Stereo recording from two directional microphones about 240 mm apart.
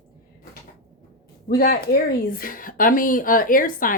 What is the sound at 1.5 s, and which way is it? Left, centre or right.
A woman's voice, left.